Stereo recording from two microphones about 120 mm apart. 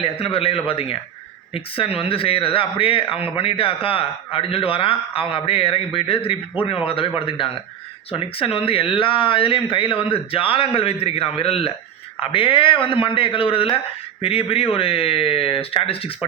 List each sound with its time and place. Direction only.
0.0 s speech: 50° left (ahead or behind)